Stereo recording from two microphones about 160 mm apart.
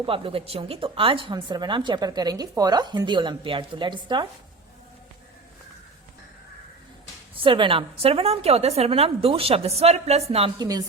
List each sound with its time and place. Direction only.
0.0 s speech: 35° right (ahead or behind)
7.4 s a woman's voice: 30° right (ahead or behind)
10.6 s speech: 25° right (ahead or behind)